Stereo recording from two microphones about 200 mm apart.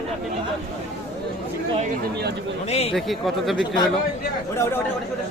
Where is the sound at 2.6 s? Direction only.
30° left (ahead or behind).